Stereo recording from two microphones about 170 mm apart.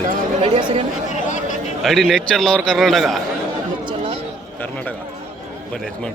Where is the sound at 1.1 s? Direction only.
45° left (ahead or behind).